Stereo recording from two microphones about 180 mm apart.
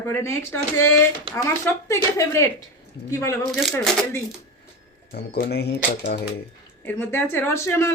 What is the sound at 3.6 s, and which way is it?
Speech, centre (ahead or behind).